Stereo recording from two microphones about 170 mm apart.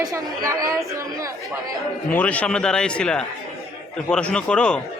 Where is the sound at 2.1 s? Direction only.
10° left (ahead or behind).